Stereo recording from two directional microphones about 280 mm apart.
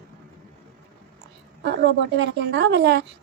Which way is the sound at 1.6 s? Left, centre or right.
Right.